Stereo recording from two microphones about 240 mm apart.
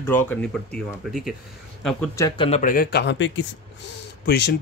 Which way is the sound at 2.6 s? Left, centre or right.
Left.